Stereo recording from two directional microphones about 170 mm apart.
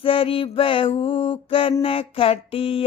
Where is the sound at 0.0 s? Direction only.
35° left (ahead or behind).